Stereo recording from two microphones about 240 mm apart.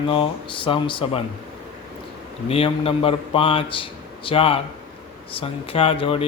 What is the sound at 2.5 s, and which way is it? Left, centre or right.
Speech, left.